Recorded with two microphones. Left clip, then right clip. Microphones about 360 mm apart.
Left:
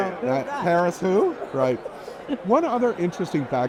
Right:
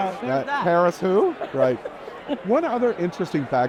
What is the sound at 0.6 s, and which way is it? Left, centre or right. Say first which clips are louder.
Speech: right 1 dB; centre.